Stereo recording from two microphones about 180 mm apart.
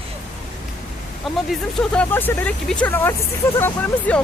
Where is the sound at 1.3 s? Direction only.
Centre (ahead or behind).